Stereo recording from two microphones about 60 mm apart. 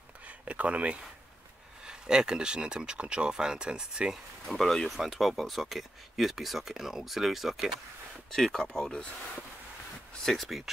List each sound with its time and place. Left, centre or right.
0.2 s a sound: right
1.9 s speech: centre
4.5 s speech: centre
10.2 s speech: centre